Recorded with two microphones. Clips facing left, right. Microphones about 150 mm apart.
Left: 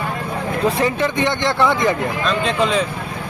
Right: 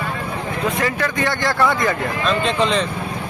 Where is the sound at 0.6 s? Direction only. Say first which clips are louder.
Left 3 dB; 30° left (ahead or behind).